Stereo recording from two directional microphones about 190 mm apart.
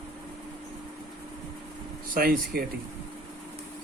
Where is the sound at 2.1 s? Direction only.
50° right (ahead or behind).